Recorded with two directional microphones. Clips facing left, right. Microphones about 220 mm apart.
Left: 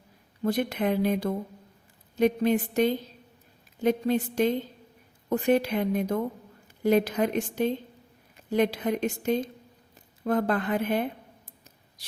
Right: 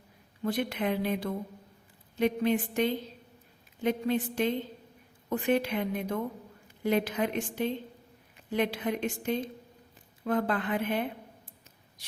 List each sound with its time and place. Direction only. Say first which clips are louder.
0.4 s a woman's voice: left 4 dB; 40° left (ahead or behind)